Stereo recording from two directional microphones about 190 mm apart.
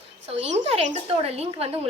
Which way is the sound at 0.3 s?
35° right (ahead or behind).